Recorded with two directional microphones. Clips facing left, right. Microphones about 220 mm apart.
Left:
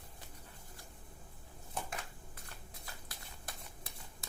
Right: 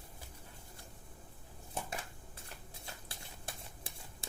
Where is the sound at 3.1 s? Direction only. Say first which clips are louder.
Right 2 dB; 30° right (ahead or behind).